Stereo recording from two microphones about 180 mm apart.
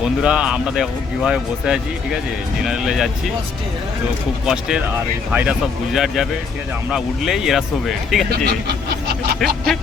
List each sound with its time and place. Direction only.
0.0 s speech: 5° right (ahead or behind)
4.4 s speech: 5° right (ahead or behind)
8.4 s a sound: 65° right (ahead or behind)
9.4 s speech: centre (ahead or behind)